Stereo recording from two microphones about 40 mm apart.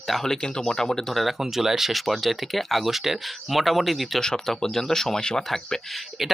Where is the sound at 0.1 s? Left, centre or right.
Centre.